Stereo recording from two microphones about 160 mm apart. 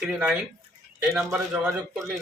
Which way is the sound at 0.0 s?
5° right (ahead or behind).